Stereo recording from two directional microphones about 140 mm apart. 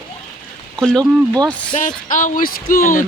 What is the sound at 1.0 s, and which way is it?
Speech, 25° right (ahead or behind).